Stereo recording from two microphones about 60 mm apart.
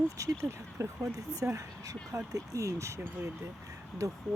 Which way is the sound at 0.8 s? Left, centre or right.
Right.